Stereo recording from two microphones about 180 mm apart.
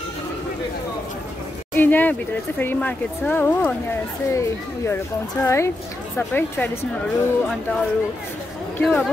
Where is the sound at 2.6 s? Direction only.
10° left (ahead or behind).